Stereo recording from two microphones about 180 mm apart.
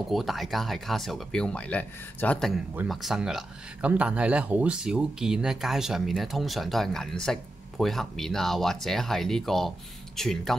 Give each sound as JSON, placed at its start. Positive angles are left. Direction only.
{"t": 0.1, "sound": "speech", "side_deg": 0}